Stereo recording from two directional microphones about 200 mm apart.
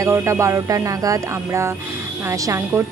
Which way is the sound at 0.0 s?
15° right (ahead or behind).